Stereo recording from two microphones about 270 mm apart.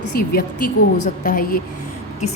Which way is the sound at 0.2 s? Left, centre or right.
Left.